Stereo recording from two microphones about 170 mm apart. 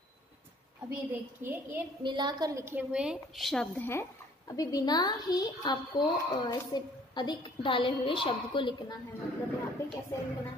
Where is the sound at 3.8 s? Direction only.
20° left (ahead or behind).